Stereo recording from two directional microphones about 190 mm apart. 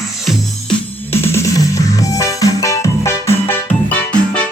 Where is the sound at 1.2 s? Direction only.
15° left (ahead or behind).